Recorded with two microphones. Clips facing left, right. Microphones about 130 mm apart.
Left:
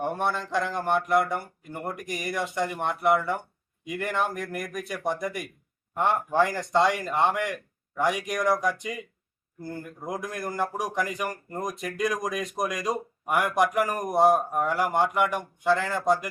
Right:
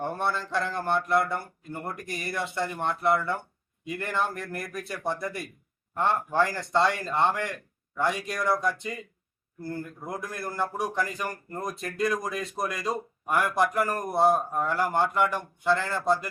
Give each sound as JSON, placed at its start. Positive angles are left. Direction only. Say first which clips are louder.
{"t": 0.0, "sound": "speech", "louder": "left 2 dB", "side_deg": 15}